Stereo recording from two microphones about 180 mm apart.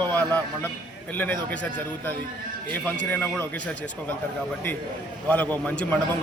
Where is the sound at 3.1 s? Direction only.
10° left (ahead or behind).